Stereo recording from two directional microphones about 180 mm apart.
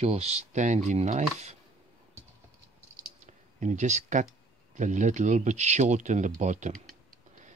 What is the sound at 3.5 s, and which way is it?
Speech, 40° right (ahead or behind).